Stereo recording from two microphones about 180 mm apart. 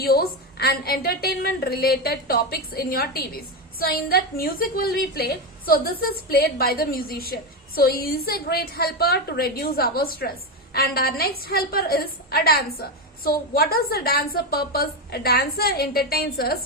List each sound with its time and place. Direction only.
0.0 s a woman's voice: 60° left (ahead or behind)